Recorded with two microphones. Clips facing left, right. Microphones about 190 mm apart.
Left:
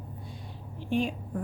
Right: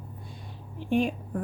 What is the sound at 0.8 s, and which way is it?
Speech, 50° right (ahead or behind).